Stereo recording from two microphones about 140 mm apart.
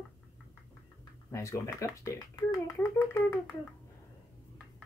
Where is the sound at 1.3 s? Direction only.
20° left (ahead or behind).